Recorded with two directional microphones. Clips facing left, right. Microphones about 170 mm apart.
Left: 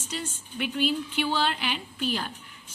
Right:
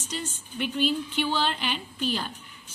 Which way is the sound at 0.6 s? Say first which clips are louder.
Right 1 dB; 10° left (ahead or behind).